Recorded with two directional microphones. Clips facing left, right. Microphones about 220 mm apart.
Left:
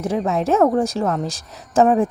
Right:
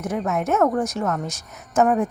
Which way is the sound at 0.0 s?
30° left (ahead or behind).